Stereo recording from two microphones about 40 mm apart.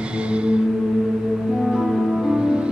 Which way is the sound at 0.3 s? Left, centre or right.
Right.